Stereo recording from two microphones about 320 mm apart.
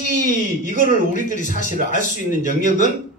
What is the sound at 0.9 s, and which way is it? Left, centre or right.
Speech, left.